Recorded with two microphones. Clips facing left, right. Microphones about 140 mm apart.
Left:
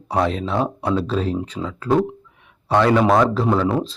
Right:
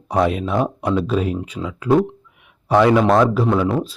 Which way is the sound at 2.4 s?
15° right (ahead or behind).